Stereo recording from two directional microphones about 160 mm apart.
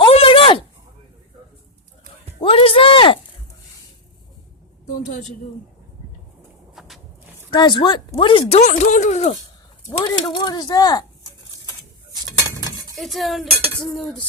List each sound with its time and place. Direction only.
0.0 s a sound: 35° left (ahead or behind)
2.4 s speech: 35° left (ahead or behind)
4.9 s a woman's voice: 50° left (ahead or behind)
6.7 s walk: centre (ahead or behind)
7.5 s speech: 30° left (ahead or behind); by 9.3 s 45° left (ahead or behind)
10.0 s speech: 30° left (ahead or behind)
13.0 s cutlery: centre (ahead or behind)